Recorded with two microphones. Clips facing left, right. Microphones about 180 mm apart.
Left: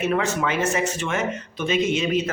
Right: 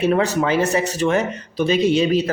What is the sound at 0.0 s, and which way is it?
Speech, 35° right (ahead or behind).